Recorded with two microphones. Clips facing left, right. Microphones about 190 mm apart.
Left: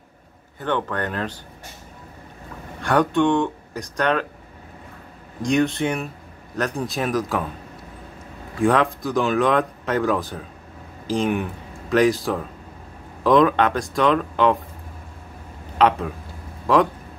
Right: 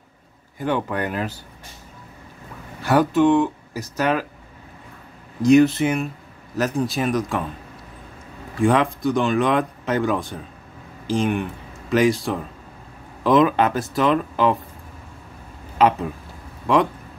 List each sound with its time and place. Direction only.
0.6 s speech: 10° right (ahead or behind)
2.8 s speech: 5° right (ahead or behind)
5.4 s speech: 5° right (ahead or behind)
8.5 s speech: centre (ahead or behind)
15.8 s speech: 5° right (ahead or behind)